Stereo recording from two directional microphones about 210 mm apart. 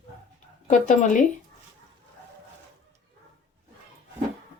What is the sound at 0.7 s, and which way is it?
Speech, 35° left (ahead or behind).